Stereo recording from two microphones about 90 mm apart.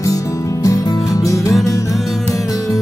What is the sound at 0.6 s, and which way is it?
Music, 40° left (ahead or behind).